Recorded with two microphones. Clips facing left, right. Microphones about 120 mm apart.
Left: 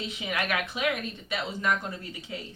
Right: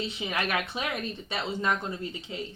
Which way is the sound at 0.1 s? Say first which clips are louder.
Even; 30° right (ahead or behind).